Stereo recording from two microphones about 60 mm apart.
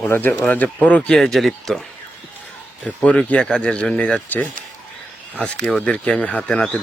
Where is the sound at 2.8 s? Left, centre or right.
Left.